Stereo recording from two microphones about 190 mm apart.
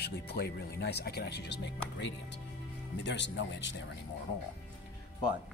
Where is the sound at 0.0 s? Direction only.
55° left (ahead or behind).